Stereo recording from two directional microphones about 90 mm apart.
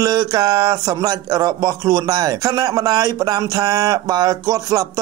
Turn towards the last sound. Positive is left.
turn(degrees=-40)  # may be behind; listen again after turning